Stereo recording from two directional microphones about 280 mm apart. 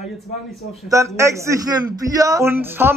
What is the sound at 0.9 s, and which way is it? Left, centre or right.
A man's voice, centre.